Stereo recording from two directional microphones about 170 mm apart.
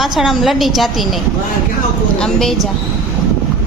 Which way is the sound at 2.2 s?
5° left (ahead or behind).